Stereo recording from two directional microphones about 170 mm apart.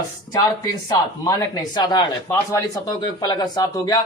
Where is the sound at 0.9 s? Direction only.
20° left (ahead or behind).